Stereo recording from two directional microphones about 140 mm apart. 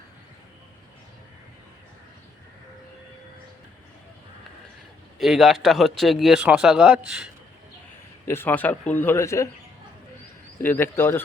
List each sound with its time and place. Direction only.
5.2 s a man's voice: centre (ahead or behind)
8.3 s speech: 15° left (ahead or behind)
10.6 s speech: 15° left (ahead or behind)